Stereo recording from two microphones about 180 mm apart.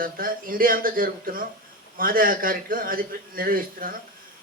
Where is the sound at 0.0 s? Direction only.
50° right (ahead or behind).